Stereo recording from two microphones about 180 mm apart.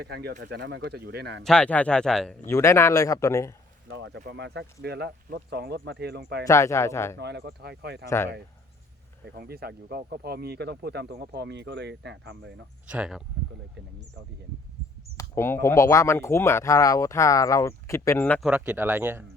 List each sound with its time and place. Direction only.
0.0 s speech: 60° right (ahead or behind)
0.4 s speech: 75° right (ahead or behind)
1.5 s speech: 5° left (ahead or behind)
2.5 s speech: 15° left (ahead or behind)
3.8 s speech: 85° right; by 6.4 s 65° right (ahead or behind)
6.5 s speech: 15° left (ahead or behind)
7.2 s speech: 70° right (ahead or behind)
9.2 s speech: 60° right (ahead or behind); by 12.6 s 75° right (ahead or behind)
12.9 s speech: 5° right (ahead or behind)
15.2 s speech: 15° left (ahead or behind)
18.4 s speech: 5° right (ahead or behind)